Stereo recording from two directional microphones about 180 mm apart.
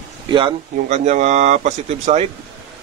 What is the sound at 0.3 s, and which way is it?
Speech, 30° right (ahead or behind).